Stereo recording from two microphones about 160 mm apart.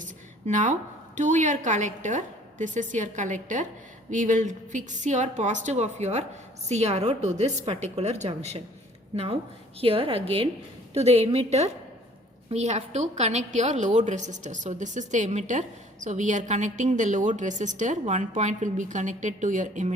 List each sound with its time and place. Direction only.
0.0 s a woman's voice: 50° right (ahead or behind)